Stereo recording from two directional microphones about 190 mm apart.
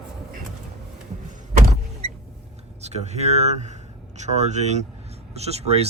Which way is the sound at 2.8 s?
35° right (ahead or behind).